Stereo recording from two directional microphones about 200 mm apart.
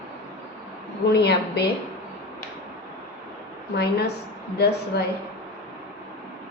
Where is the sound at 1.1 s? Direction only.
55° left (ahead or behind).